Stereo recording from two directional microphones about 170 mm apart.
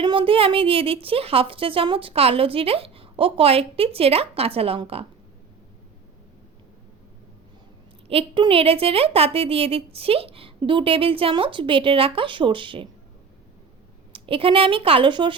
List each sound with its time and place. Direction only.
0.0 s a woman's voice: 30° right (ahead or behind)
8.0 s a woman's voice: 35° right (ahead or behind)
14.1 s a woman's voice: 30° right (ahead or behind)